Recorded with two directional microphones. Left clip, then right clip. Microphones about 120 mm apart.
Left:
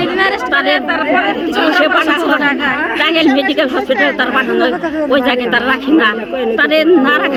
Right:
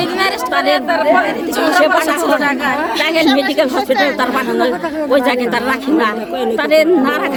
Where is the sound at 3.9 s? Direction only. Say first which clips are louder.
Left 2 dB; 60° right (ahead or behind).